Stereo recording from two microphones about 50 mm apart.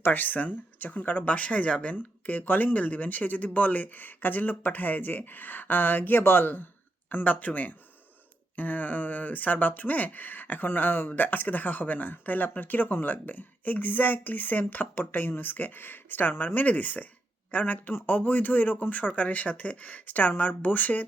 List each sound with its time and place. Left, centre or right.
0.0 s speech: left
16.3 s speech: left
16.6 s speech: left